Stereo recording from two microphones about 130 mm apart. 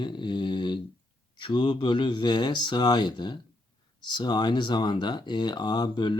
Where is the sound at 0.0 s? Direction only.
35° left (ahead or behind).